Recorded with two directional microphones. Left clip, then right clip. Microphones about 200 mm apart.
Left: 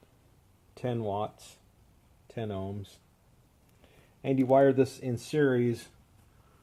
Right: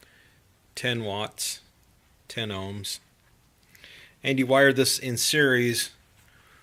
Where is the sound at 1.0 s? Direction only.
15° right (ahead or behind).